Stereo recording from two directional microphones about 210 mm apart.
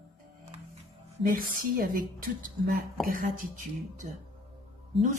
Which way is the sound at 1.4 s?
40° right (ahead or behind).